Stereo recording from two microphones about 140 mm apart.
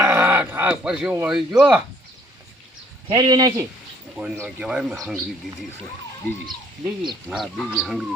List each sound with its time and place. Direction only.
0.0 s a sound: 15° right (ahead or behind)
1.3 s speech: 5° right (ahead or behind)
3.1 s speech: 30° right (ahead or behind)
4.2 s speech: 5° right (ahead or behind)
7.3 s speech: 5° right (ahead or behind)